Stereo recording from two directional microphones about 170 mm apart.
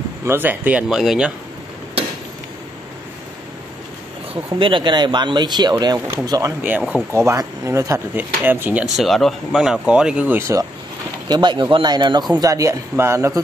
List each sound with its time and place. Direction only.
0.2 s speech: 15° right (ahead or behind)
4.6 s speech: 30° right (ahead or behind)
6.6 s speech: 10° right (ahead or behind)
8.9 s speech: centre (ahead or behind); by 13.4 s 15° right (ahead or behind)